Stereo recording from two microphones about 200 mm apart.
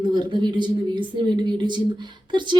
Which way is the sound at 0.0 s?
20° right (ahead or behind).